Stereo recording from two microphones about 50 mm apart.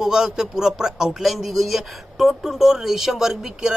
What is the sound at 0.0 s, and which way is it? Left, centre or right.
Speech, centre.